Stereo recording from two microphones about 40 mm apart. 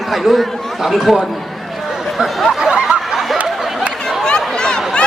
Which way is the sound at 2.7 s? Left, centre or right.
Right.